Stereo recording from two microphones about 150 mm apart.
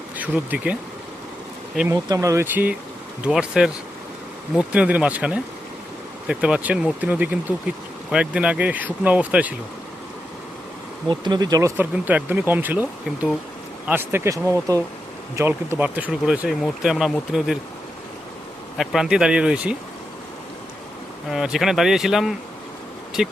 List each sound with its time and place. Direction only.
0.2 s speech: 10° right (ahead or behind)
1.9 s speech: 20° right (ahead or behind)
11.1 s speech: 30° right (ahead or behind)
11.8 s speech: 10° right (ahead or behind)
18.8 s speech: centre (ahead or behind)
21.2 s speech: 5° right (ahead or behind)